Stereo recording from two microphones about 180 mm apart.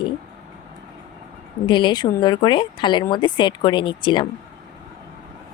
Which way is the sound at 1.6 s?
25° left (ahead or behind).